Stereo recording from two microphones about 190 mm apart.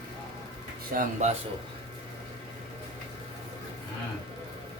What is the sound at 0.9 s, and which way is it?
Speech, 55° right (ahead or behind).